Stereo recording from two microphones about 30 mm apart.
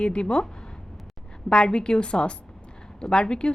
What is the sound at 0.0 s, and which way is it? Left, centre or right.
Speech, left.